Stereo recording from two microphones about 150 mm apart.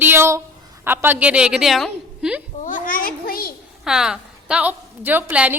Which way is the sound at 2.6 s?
65° left (ahead or behind).